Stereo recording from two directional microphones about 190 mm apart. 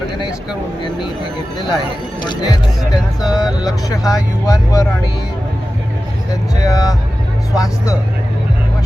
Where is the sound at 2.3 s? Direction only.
20° left (ahead or behind).